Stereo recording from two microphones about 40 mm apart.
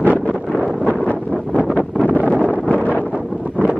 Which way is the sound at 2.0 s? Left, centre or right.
Left.